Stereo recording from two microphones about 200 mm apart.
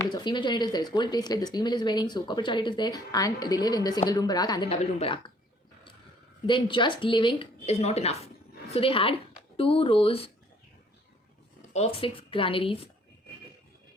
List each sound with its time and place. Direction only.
0.0 s speech: 20° left (ahead or behind)
6.4 s speech: 25° left (ahead or behind)
11.7 s speech: 30° left (ahead or behind)